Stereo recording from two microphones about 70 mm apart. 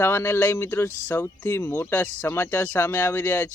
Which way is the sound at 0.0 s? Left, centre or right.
Left.